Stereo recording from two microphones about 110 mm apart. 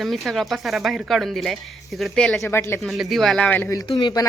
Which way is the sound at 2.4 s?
25° left (ahead or behind).